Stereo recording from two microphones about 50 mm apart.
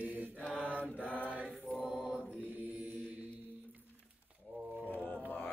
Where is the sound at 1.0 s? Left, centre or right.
Left.